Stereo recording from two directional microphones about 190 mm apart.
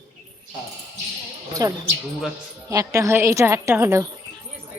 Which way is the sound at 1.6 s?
20° right (ahead or behind).